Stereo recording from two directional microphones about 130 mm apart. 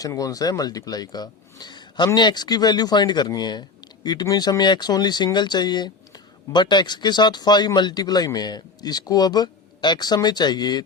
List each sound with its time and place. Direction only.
0.0 s speech: 25° left (ahead or behind)